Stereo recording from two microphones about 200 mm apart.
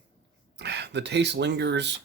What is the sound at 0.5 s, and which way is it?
Speech, 60° right (ahead or behind).